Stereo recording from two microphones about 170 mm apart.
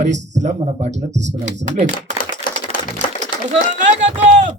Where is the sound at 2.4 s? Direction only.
55° left (ahead or behind).